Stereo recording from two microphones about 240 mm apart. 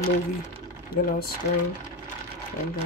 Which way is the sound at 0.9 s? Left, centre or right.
Left.